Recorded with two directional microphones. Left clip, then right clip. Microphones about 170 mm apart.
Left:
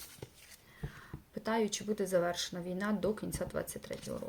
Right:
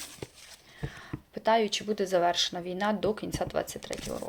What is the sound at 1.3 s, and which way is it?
Speech, 20° left (ahead or behind).